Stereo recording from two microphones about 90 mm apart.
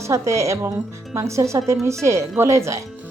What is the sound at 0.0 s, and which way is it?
A woman's voice, 35° right (ahead or behind).